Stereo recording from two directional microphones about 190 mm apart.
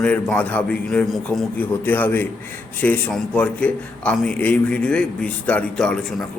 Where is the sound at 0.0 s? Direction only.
5° left (ahead or behind).